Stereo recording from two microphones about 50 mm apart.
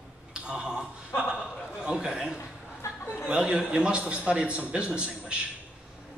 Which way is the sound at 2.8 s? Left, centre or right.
Left.